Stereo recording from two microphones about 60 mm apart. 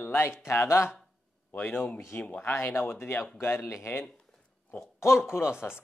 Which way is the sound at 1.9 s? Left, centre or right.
Left.